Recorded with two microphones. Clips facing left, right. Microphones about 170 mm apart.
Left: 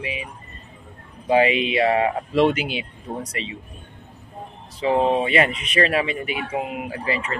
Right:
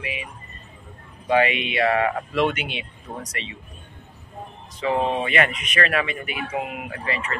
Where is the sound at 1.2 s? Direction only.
30° left (ahead or behind).